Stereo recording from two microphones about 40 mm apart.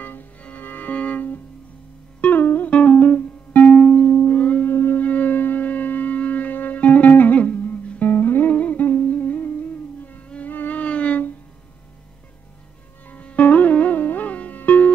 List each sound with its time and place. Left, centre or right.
0.0 s music: left
0.4 s music: left
0.7 s music: left
2.6 s music: left
4.6 s a sound: left
4.9 s a sound: left
6.8 s music: left
7.1 s music: left
7.3 s music: left
7.6 s music: left
8.5 s music: left
10.2 s music: left
13.1 s music: left